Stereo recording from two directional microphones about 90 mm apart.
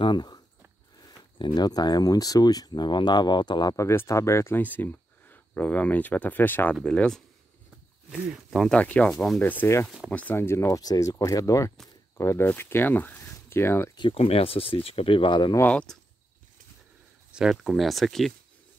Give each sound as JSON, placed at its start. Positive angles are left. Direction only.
{"t": 0.0, "sound": "a sound", "side_deg": 55}
{"t": 1.4, "sound": "speech", "side_deg": 50}
{"t": 3.7, "sound": "speech", "side_deg": 30}
{"t": 4.6, "sound": "speech", "side_deg": 20}
{"t": 6.8, "sound": "speech", "side_deg": 10}
{"t": 8.1, "sound": "speech", "side_deg": -5}
{"t": 8.7, "sound": "speech", "side_deg": 15}
{"t": 10.8, "sound": "speech", "side_deg": 40}
{"t": 13.9, "sound": "speech", "side_deg": 80}
{"t": 15.7, "sound": "speech", "side_deg": 10}
{"t": 17.3, "sound": "speech", "side_deg": -5}